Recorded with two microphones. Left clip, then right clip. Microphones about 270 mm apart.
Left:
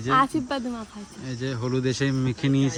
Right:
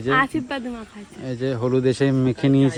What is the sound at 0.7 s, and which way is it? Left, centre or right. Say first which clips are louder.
Speech: right 1 dB; centre.